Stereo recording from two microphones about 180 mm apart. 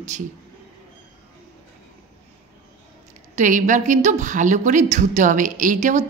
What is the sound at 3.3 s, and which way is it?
A woman's voice, 45° right (ahead or behind).